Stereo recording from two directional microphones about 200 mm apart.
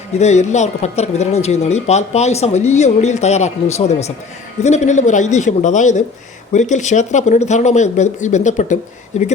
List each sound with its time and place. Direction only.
0.2 s speech: 35° left (ahead or behind)